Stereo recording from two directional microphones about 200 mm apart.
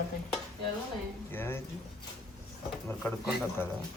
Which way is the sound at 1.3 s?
10° left (ahead or behind).